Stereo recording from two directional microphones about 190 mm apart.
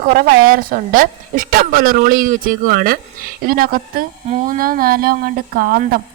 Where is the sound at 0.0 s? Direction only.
50° right (ahead or behind).